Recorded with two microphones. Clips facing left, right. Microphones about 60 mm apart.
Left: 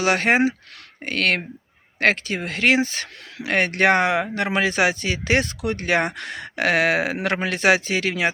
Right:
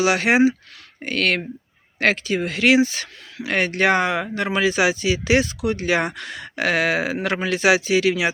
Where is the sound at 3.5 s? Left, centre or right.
Left.